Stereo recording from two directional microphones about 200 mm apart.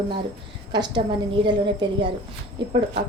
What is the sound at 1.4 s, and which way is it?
A woman's voice, 20° right (ahead or behind).